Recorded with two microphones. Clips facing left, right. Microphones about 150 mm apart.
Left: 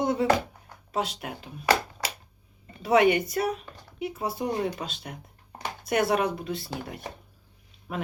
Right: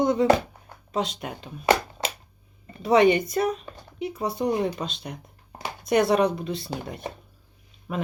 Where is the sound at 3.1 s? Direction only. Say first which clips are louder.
Right 3 dB; 5° left (ahead or behind).